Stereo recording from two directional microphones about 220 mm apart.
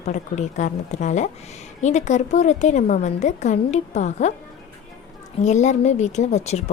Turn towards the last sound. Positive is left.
turn(degrees=30)  # may be behind; listen again after turning